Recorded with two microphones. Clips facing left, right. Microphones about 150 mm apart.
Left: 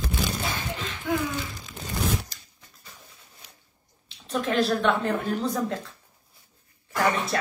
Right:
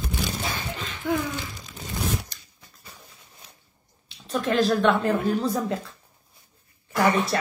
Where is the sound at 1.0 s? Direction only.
45° right (ahead or behind).